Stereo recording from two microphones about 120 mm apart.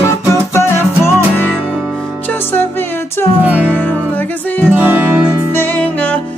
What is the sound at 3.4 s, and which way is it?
Music, 10° right (ahead or behind).